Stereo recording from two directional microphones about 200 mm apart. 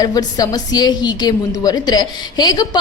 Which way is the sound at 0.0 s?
20° left (ahead or behind).